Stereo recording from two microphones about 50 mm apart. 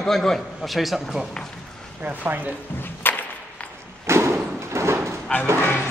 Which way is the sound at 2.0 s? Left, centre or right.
Right.